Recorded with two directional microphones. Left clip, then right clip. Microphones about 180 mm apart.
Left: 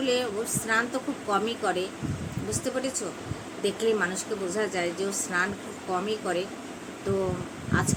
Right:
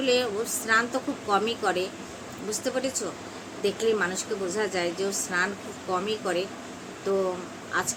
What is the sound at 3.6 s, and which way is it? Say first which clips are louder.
Speech: right 1 dB; 5° right (ahead or behind).